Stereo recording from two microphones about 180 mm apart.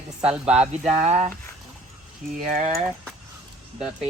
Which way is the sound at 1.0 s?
35° right (ahead or behind).